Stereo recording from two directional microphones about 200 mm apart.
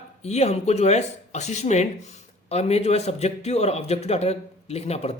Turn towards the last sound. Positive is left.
turn(degrees=30)  # may be behind; listen again after turning